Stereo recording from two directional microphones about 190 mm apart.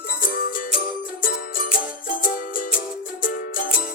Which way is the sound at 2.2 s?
45° left (ahead or behind).